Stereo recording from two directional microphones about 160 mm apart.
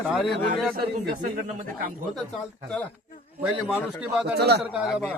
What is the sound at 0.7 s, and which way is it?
Speech, 65° right (ahead or behind).